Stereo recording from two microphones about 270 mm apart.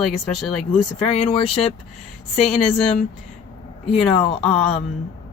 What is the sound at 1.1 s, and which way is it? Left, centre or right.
Speech, left.